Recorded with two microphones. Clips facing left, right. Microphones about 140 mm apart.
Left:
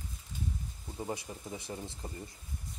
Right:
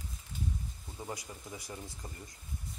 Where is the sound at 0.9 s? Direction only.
25° left (ahead or behind).